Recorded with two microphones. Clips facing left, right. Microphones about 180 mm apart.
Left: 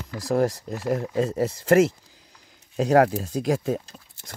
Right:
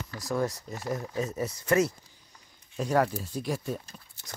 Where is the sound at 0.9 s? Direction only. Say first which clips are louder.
Left 8 dB; 85° left.